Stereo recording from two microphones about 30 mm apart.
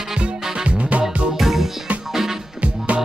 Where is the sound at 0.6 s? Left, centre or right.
Right.